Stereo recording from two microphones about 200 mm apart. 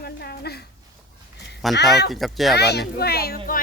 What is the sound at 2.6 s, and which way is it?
Speech, 55° left (ahead or behind).